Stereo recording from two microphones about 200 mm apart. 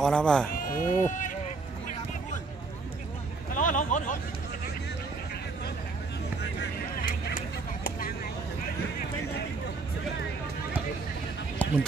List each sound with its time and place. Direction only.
0.0 s speech: 5° left (ahead or behind)
0.5 s speech: 45° left (ahead or behind)
3.5 s a sound: 40° left (ahead or behind)
6.6 s vehicle: 55° left (ahead or behind)